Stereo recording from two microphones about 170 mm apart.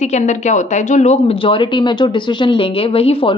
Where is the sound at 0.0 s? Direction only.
45° left (ahead or behind).